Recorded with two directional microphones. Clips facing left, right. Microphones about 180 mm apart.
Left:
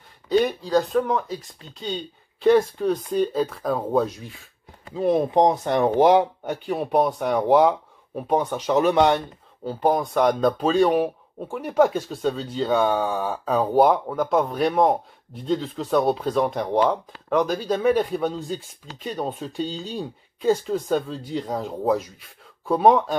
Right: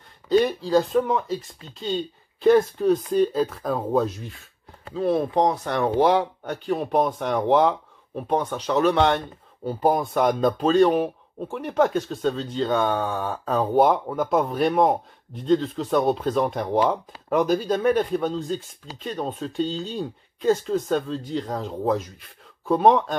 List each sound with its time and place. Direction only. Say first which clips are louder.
0.3 s speech: right 1 dB; centre (ahead or behind)
2.4 s speech: right 1 dB; centre (ahead or behind)
4.9 s speech: left 2 dB; 15° left (ahead or behind)
6.6 s speech: left 1 dB; 5° left (ahead or behind)
9.7 s speech: even; centre (ahead or behind)